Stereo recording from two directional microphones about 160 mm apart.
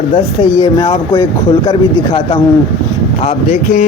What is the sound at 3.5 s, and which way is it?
Speech, 55° left (ahead or behind).